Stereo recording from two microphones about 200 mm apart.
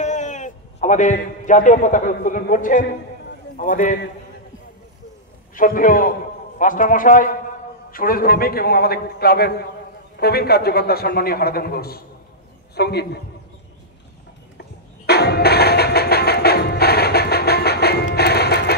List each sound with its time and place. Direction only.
0.0 s a man's voice: 35° left (ahead or behind)
5.5 s a man's voice: 40° left (ahead or behind)
15.0 s music: 55° left (ahead or behind)